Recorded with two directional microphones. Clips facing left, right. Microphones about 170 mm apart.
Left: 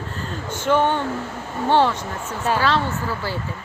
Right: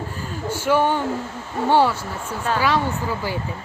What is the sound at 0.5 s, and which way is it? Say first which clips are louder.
Speech: even; 10° right (ahead or behind).